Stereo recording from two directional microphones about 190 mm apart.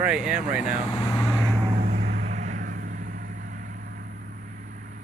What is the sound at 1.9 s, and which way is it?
Vehicle, 55° right (ahead or behind).